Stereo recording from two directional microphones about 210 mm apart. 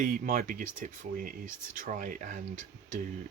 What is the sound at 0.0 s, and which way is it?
Speech, 40° right (ahead or behind).